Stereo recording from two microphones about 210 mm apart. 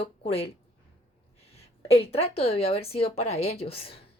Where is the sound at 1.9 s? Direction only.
30° left (ahead or behind).